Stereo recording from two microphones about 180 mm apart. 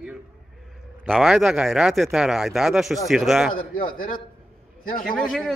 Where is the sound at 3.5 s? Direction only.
50° left (ahead or behind).